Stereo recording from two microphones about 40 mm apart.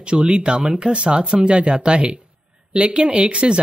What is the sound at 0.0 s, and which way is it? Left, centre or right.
Speech, right.